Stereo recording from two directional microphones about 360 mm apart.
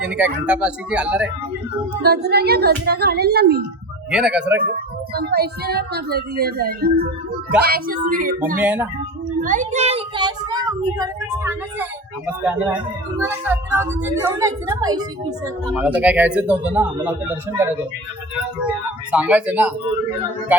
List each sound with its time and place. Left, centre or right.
0.0 s speech: centre
2.0 s speech: right
4.1 s speech: centre
5.1 s speech: right
8.6 s speech: centre
9.4 s a child's voice: right; by 17.7 s centre
19.1 s speech: centre